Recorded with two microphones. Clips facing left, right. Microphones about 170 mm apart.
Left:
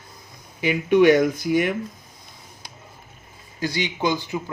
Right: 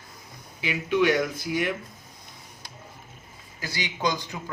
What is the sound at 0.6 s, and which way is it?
Speech, 55° left (ahead or behind).